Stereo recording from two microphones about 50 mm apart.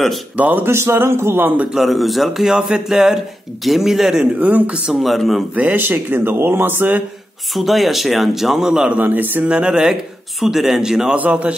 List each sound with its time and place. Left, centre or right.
0.4 s speech: right
0.7 s speech: right
1.9 s speech: centre
4.4 s speech: right
5.0 s speech: centre
5.5 s speech: right
5.8 s speech: right
7.5 s speech: centre
8.9 s speech: right
9.4 s speech: right
11.1 s speech: right